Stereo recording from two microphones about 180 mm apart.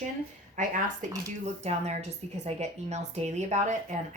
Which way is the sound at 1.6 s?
35° right (ahead or behind).